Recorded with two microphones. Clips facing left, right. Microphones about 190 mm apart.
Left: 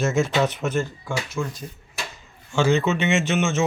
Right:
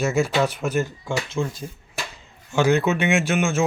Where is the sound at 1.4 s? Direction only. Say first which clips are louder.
Right 2 dB; 30° right (ahead or behind).